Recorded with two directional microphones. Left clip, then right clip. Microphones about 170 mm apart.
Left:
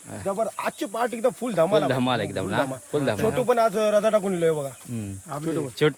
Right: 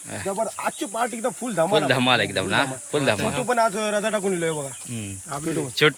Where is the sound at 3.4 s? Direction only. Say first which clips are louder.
Left 1 dB; 60° left (ahead or behind).